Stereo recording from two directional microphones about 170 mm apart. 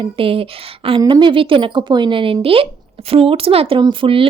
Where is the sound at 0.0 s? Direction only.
30° right (ahead or behind).